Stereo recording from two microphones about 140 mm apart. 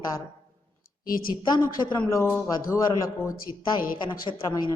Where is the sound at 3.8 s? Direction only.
90° left.